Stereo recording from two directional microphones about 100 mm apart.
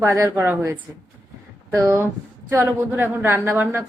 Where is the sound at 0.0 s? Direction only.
25° right (ahead or behind).